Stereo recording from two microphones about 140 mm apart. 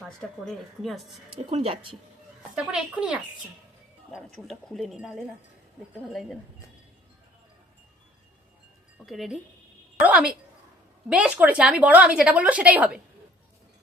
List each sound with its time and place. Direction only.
0.2 s speech: centre (ahead or behind)
1.5 s speech: 40° right (ahead or behind)
2.6 s a woman's voice: 5° right (ahead or behind)
9.0 s a woman's voice: centre (ahead or behind)